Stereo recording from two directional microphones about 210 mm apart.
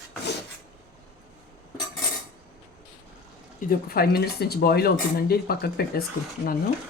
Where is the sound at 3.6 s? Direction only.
45° left (ahead or behind).